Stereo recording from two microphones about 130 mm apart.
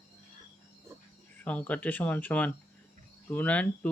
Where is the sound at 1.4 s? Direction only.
10° left (ahead or behind).